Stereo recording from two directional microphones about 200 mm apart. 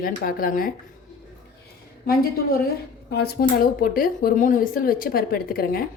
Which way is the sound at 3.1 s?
50° left (ahead or behind).